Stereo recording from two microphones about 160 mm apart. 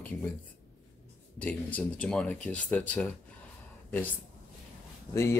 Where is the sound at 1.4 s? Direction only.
10° left (ahead or behind).